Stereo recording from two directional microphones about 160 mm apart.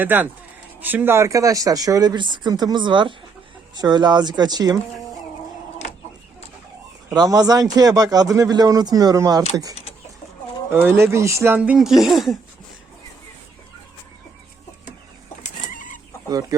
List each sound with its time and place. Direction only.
0.0 s speech: 10° right (ahead or behind)
7.1 s speech: 25° right (ahead or behind)
10.7 s speech: 15° right (ahead or behind)
15.7 s chicken: 55° left (ahead or behind)
16.3 s speech: 20° right (ahead or behind)